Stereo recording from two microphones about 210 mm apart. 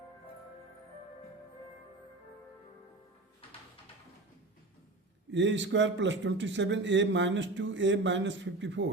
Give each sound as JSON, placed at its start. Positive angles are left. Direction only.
{"t": 5.3, "sound": "a man's voice", "side_deg": -60}